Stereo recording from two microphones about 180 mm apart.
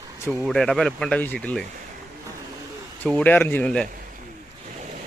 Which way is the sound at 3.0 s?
10° left (ahead or behind).